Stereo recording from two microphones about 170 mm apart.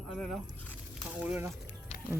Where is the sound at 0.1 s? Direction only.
Centre (ahead or behind).